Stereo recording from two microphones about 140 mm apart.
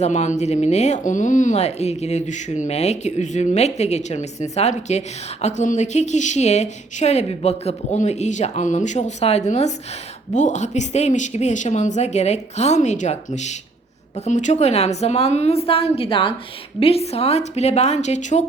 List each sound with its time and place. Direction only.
0.0 s a woman's voice: 55° left (ahead or behind)